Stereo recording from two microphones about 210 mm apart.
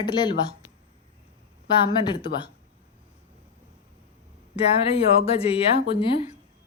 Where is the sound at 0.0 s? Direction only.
20° left (ahead or behind).